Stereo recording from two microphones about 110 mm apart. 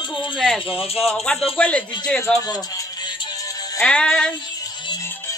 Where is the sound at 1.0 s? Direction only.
5° left (ahead or behind).